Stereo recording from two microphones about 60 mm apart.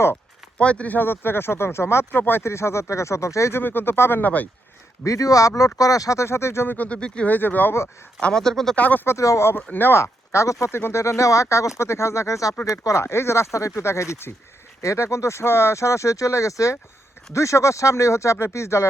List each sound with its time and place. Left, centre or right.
0.6 s speech: left
0.9 s speech: left
2.4 s speech: left
3.5 s speech: left
4.2 s speech: left
5.0 s speech: left
6.7 s speech: left
7.3 s speech: left
8.2 s speech: centre
8.7 s speech: left
9.0 s speech: left
9.6 s speech: left
10.0 s speech: left